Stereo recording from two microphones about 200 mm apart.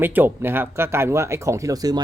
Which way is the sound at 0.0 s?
10° right (ahead or behind).